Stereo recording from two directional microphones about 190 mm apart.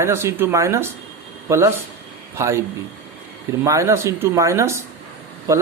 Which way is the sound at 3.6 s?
15° right (ahead or behind).